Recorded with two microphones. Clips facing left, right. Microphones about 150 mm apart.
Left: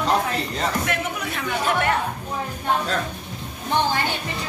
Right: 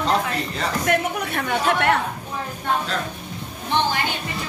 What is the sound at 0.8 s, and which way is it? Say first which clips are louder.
Speech: right 4 dB; 60° right (ahead or behind).